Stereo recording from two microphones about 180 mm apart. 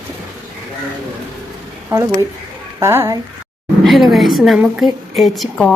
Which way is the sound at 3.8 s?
Centre (ahead or behind).